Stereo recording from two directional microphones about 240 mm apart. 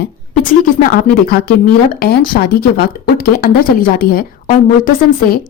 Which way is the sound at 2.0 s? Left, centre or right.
Left.